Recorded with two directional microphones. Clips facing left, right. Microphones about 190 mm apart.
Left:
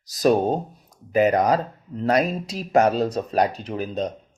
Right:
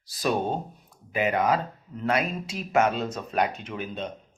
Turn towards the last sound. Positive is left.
turn(degrees=40)  # may be behind; listen again after turning